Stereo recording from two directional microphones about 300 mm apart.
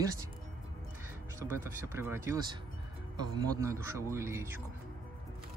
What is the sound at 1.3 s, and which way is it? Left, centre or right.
Speech, centre.